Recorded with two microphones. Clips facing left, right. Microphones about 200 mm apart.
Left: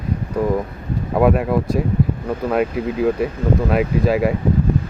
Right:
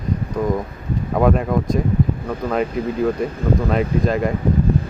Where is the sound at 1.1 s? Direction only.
5° left (ahead or behind).